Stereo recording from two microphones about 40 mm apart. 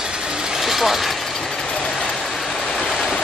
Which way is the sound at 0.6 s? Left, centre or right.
Centre.